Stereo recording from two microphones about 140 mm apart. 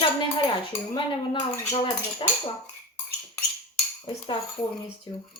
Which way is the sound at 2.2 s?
35° left (ahead or behind).